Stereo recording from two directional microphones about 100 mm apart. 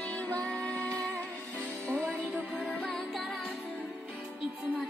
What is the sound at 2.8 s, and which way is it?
Music, 5° left (ahead or behind).